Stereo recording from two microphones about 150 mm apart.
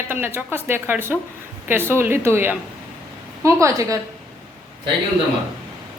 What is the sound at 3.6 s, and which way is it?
Speech, 20° right (ahead or behind).